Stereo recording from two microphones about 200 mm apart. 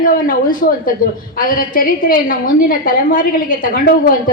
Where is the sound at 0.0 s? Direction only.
45° left (ahead or behind).